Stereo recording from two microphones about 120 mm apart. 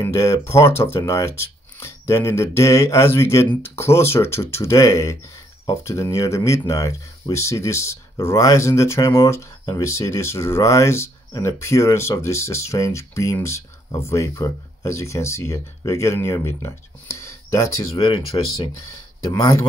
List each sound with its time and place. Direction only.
0.0 s speech: 25° left (ahead or behind)
17.9 s speech: 40° left (ahead or behind)
19.2 s speech: 30° left (ahead or behind)